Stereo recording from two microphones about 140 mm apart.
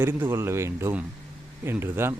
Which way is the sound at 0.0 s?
15° right (ahead or behind).